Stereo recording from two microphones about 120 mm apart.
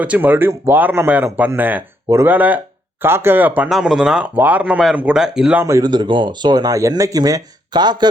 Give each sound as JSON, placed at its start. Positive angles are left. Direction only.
{"t": 0.0, "sound": "speech", "side_deg": -15}
{"t": 3.7, "sound": "speech", "side_deg": 0}
{"t": 5.6, "sound": "speech", "side_deg": -30}